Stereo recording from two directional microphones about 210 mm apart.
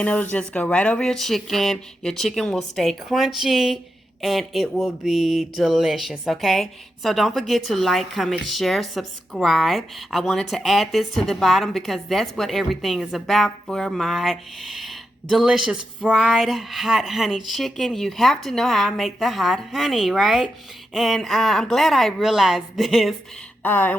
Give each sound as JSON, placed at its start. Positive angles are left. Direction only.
{"t": 0.0, "sound": "speech", "side_deg": 5}